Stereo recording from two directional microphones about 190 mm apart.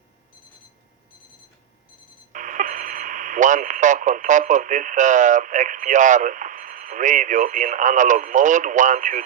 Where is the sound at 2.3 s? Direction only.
45° right (ahead or behind).